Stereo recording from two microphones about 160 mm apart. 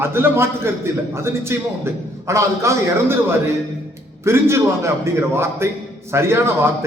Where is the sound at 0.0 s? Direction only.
15° right (ahead or behind).